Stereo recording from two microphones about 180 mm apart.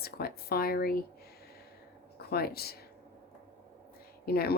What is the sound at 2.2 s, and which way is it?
Speech, 60° left (ahead or behind).